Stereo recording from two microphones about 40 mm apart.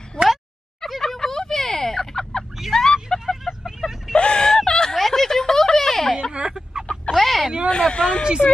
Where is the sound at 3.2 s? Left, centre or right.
Centre.